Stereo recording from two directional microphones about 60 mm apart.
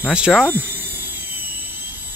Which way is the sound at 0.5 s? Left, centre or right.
Right.